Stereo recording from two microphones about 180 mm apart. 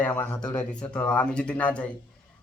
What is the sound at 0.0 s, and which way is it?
Speech, 5° left (ahead or behind).